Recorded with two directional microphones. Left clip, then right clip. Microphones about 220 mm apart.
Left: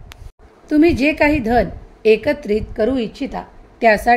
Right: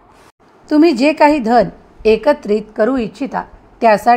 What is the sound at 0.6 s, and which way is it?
A woman's voice, 15° right (ahead or behind).